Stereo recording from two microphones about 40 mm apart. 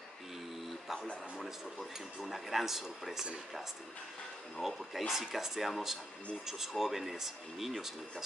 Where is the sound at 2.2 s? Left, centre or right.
Centre.